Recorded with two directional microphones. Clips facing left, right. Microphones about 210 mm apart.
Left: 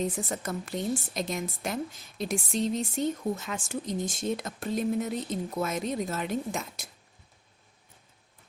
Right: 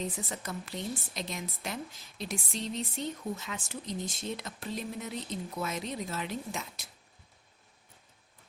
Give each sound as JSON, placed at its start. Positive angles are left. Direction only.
{"t": 0.0, "sound": "a woman's voice", "side_deg": 45}